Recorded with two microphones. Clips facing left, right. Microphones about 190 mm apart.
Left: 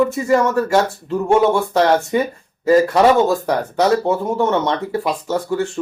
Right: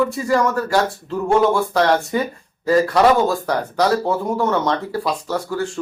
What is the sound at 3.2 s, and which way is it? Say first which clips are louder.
Speech: left 2 dB; 25° left (ahead or behind).